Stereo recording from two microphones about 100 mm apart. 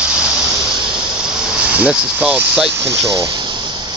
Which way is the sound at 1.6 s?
10° right (ahead or behind).